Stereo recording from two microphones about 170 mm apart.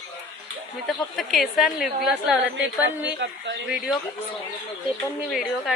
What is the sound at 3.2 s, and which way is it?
Speech, 90° right.